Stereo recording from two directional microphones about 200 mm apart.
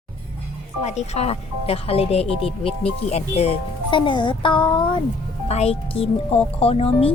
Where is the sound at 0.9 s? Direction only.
35° left (ahead or behind).